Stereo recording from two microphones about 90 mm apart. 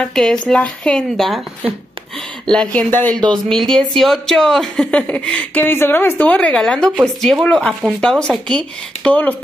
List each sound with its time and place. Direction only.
0.0 s a woman's voice: 10° left (ahead or behind)
2.4 s a woman's voice: 10° left (ahead or behind)
2.9 s speech: 20° left (ahead or behind)
3.3 s a woman's voice: 5° left (ahead or behind)